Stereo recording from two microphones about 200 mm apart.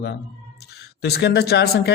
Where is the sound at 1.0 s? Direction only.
55° left (ahead or behind).